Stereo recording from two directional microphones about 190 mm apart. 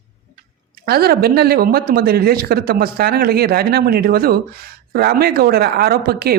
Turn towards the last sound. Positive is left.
turn(degrees=-55)  # may be behind; listen again after turning